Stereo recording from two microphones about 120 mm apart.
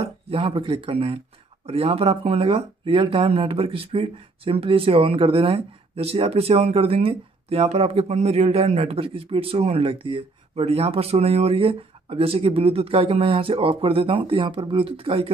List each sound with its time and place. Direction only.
0.0 s speech: 50° right (ahead or behind)